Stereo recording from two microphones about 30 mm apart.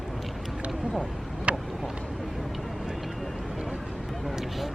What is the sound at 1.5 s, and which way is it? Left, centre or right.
Vehicle, right.